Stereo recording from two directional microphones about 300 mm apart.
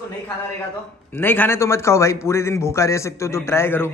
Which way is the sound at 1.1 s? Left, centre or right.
Centre.